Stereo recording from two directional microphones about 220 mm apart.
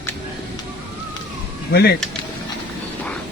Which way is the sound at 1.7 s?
45° left (ahead or behind).